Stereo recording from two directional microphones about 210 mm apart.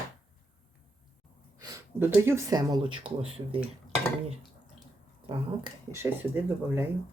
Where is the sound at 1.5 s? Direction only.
15° right (ahead or behind).